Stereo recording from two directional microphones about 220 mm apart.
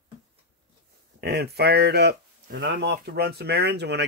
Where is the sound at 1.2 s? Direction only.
45° right (ahead or behind).